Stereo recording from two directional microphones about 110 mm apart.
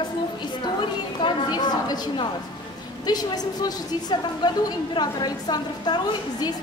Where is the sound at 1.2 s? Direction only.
40° left (ahead or behind).